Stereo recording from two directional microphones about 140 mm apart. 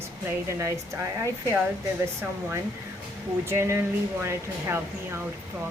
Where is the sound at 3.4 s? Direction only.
20° right (ahead or behind).